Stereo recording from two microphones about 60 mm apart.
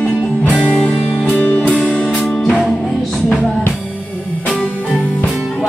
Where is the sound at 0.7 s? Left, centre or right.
Left.